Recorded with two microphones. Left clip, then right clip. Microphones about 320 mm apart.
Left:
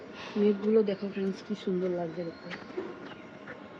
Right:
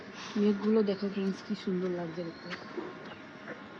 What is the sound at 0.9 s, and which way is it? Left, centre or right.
Speech, right.